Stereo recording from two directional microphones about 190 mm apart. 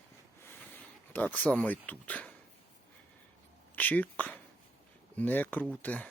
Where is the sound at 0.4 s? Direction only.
10° left (ahead or behind).